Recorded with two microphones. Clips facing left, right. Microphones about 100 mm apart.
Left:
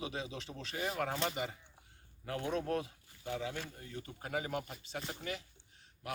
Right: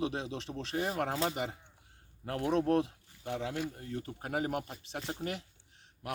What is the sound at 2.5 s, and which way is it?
Speech, 65° right (ahead or behind).